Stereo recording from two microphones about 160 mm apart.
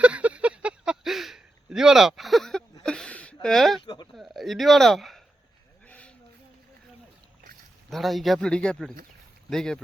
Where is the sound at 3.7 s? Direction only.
25° left (ahead or behind).